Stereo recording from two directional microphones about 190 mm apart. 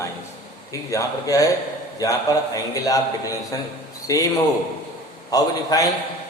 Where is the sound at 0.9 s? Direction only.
20° left (ahead or behind).